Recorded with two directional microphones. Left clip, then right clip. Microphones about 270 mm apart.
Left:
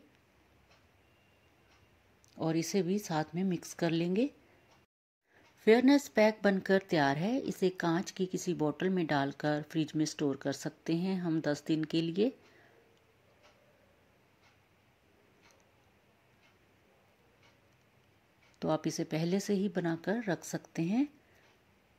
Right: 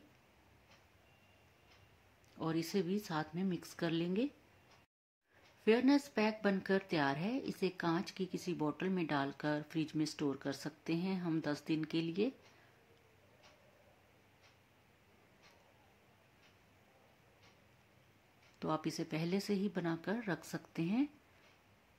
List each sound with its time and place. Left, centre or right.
2.3 s speech: centre
5.7 s a woman's voice: left
18.6 s a woman's voice: centre